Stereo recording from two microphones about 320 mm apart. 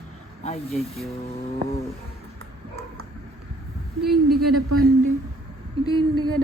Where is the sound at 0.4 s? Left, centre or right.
Centre.